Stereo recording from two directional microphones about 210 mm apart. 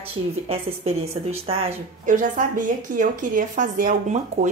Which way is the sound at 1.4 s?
30° right (ahead or behind).